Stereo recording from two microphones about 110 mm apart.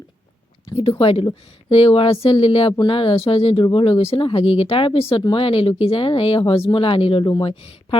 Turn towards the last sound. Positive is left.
turn(degrees=55)  # may be behind; listen again after turning